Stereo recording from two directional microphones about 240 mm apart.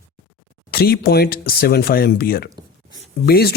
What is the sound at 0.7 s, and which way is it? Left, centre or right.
Speech, left.